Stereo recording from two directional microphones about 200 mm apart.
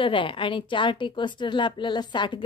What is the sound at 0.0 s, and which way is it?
A woman's voice, 25° left (ahead or behind).